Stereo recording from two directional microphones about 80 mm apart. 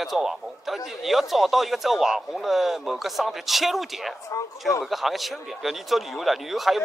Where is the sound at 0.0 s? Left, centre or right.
Centre.